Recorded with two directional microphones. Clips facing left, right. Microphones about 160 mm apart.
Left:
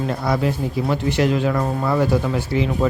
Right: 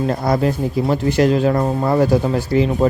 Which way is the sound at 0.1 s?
40° right (ahead or behind).